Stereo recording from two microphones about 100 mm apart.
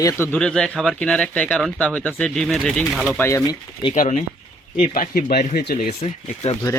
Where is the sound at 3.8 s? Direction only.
50° left (ahead or behind).